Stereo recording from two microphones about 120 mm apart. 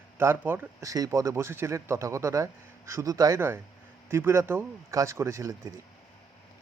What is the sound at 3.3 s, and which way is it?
Speech, 20° right (ahead or behind).